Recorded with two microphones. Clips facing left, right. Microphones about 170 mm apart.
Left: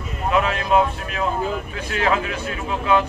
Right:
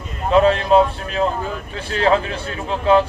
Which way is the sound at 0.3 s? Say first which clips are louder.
Right 6 dB; 30° right (ahead or behind).